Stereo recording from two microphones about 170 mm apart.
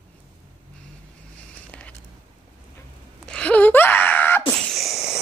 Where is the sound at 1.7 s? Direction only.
10° left (ahead or behind).